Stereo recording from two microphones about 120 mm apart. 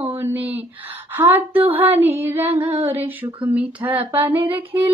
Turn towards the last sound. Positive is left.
turn(degrees=-15)  # may be behind; listen again after turning